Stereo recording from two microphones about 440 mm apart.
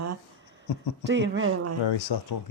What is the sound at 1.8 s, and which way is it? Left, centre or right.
Speech, left.